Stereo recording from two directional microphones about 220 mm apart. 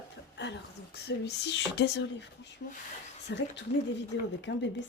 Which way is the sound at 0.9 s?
50° left (ahead or behind).